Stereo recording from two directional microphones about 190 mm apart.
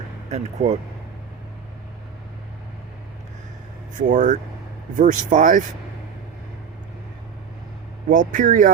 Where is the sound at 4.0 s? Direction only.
40° right (ahead or behind).